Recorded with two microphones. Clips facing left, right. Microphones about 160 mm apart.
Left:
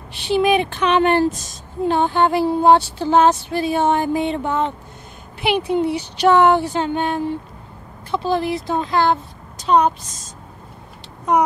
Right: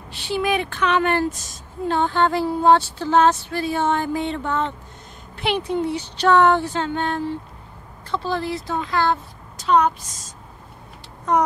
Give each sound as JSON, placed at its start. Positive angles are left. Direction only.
{"t": 0.1, "sound": "a woman's voice", "side_deg": 15}